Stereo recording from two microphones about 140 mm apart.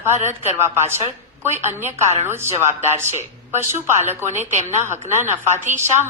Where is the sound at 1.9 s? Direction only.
50° right (ahead or behind).